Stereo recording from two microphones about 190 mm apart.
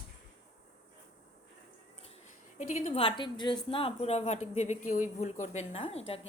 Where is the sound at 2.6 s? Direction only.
40° left (ahead or behind).